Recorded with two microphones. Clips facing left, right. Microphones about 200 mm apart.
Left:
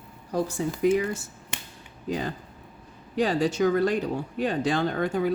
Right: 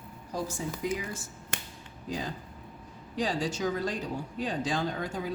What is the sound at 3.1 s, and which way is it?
Speech, 60° left (ahead or behind).